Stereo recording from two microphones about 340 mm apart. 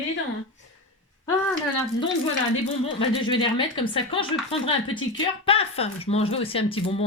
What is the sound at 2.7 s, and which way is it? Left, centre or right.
Speech, centre.